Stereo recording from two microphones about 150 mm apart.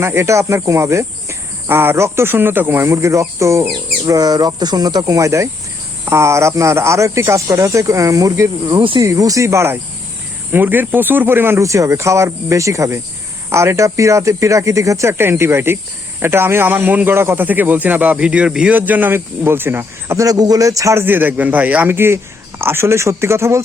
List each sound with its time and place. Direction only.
0.0 s speech: 15° right (ahead or behind)